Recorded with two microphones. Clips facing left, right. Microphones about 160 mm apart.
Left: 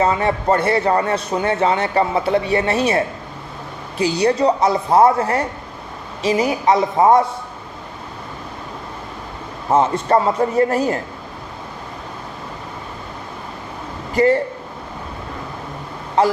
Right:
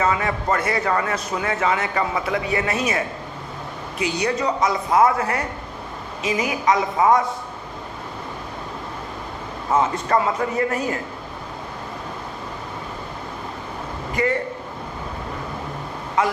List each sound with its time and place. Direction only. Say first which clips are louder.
0.0 s a man's voice: left 4 dB; 30° left (ahead or behind)
9.6 s a man's voice: left 4 dB; 30° left (ahead or behind)
14.1 s a man's voice: left 8 dB; 30° left (ahead or behind)
16.2 s a man's voice: left 5 dB; 35° left (ahead or behind)